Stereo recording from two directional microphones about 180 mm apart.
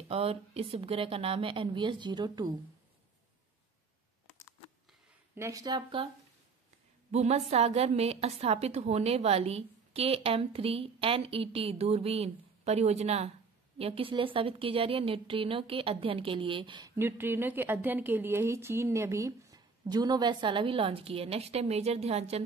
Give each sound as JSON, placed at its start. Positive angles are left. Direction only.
{"t": 0.1, "sound": "a woman's voice", "side_deg": -35}
{"t": 5.3, "sound": "a woman's voice", "side_deg": -15}
{"t": 7.1, "sound": "a woman's voice", "side_deg": -40}
{"t": 16.9, "sound": "a woman's voice", "side_deg": -10}